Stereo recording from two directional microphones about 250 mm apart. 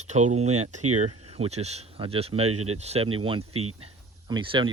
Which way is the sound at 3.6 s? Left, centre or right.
Right.